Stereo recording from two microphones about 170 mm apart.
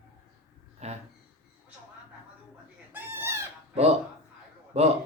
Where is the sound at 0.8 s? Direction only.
40° right (ahead or behind).